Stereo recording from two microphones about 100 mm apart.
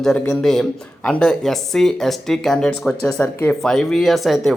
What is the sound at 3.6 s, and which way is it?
Speech, 5° left (ahead or behind).